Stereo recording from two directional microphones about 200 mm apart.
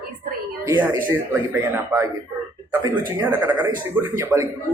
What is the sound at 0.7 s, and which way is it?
Speech, 10° right (ahead or behind).